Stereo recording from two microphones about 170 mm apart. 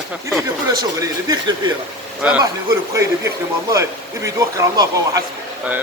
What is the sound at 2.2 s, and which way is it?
Speech, 10° right (ahead or behind).